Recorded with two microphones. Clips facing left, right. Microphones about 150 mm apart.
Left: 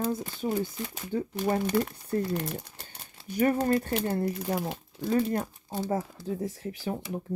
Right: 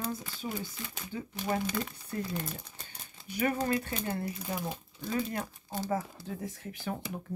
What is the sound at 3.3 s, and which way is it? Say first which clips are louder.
Speech: left 5 dB; 40° left (ahead or behind).